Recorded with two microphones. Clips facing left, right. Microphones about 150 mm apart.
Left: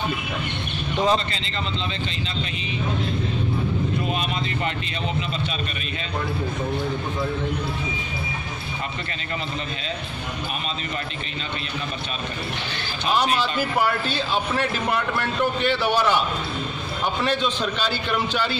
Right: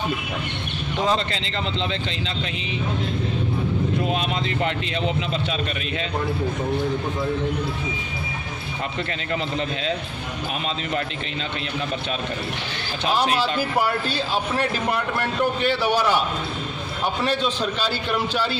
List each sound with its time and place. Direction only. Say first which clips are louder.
1.3 s speech: right 2 dB; 80° right
4.1 s speech: right 2 dB; 85° right
14.0 s a man's voice: even; 40° right (ahead or behind)
17.3 s a man's voice: even; 5° right (ahead or behind)